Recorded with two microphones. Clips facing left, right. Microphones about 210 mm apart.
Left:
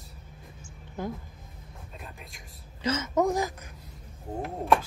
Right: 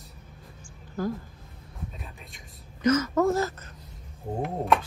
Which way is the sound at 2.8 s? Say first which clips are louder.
Right 4 dB; 25° left (ahead or behind).